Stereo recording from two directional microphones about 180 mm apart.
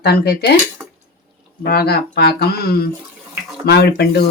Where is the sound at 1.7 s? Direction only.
60° left (ahead or behind).